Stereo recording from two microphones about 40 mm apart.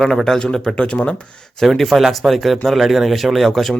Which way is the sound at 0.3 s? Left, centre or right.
Centre.